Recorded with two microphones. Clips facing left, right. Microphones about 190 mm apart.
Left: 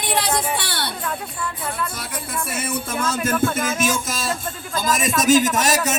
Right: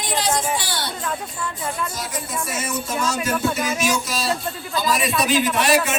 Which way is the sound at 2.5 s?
55° left (ahead or behind).